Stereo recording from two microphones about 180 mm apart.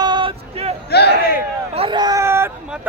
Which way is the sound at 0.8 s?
65° left (ahead or behind).